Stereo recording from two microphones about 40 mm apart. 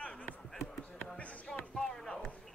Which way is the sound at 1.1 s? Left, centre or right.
Left.